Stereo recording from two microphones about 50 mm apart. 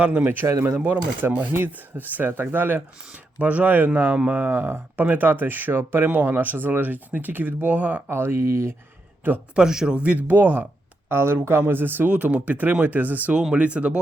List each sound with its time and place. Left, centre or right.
0.0 s speech: right
1.2 s speech: right
3.1 s speech: right
4.4 s speech: right
8.1 s speech: right
9.2 s speech: right
9.6 s speech: centre
9.9 s speech: right
11.1 s speech: right
13.3 s speech: centre
13.6 s speech: right